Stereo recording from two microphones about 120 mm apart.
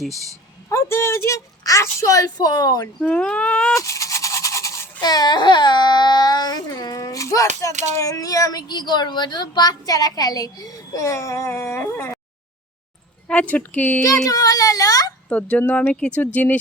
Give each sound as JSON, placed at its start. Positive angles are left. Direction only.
{"t": 0.7, "sound": "a woman's voice", "side_deg": 20}
{"t": 3.0, "sound": "speech", "side_deg": 10}
{"t": 3.8, "sound": "toothbrush", "side_deg": 25}
{"t": 4.9, "sound": "speech", "side_deg": 35}
{"t": 7.7, "sound": "speech", "side_deg": -80}
{"t": 7.9, "sound": "speech", "side_deg": 25}
{"t": 13.2, "sound": "speech", "side_deg": 10}
{"t": 14.3, "sound": "a sound", "side_deg": 30}
{"t": 15.3, "sound": "speech", "side_deg": 15}